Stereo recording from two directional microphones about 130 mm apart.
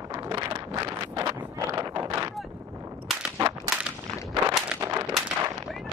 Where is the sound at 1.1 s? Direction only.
25° right (ahead or behind).